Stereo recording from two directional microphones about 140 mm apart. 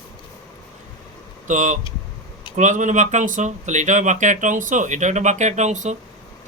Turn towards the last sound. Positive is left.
turn(degrees=-60)  # may be behind; listen again after turning